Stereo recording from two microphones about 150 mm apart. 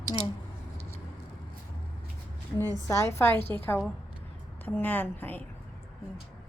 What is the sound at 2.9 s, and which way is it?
A woman's voice, 15° left (ahead or behind).